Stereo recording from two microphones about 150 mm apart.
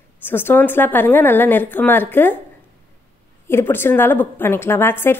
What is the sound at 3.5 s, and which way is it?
Speech, 15° left (ahead or behind).